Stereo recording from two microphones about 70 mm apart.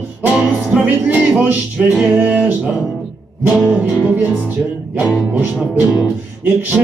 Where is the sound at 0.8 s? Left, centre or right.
Centre.